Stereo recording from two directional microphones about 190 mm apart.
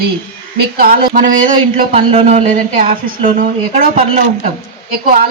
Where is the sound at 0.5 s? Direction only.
50° right (ahead or behind).